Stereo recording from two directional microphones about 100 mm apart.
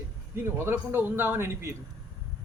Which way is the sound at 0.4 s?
25° right (ahead or behind).